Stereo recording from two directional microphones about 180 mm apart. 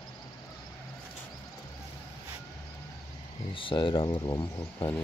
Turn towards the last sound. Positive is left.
turn(degrees=25)  # may be behind; listen again after turning